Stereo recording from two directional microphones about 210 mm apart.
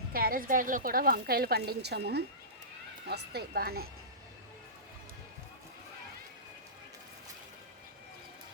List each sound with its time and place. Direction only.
0.1 s a woman's voice: 45° right (ahead or behind)